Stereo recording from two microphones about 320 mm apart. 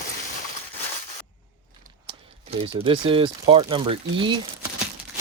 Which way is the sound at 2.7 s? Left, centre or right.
Centre.